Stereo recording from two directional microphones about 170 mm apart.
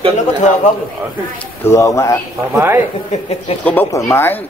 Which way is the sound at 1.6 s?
15° left (ahead or behind).